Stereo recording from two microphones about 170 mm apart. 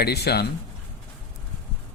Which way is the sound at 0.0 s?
70° left (ahead or behind).